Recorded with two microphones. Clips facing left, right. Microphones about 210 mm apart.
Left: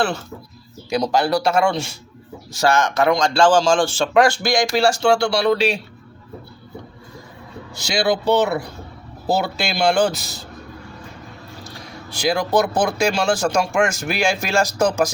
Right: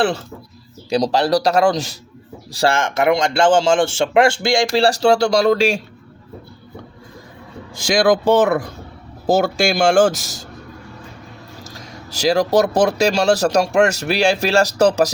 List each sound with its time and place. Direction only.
0.0 s speech: 30° right (ahead or behind); by 5.8 s 45° right (ahead or behind)
7.8 s speech: 50° right (ahead or behind)
12.2 s speech: 40° right (ahead or behind)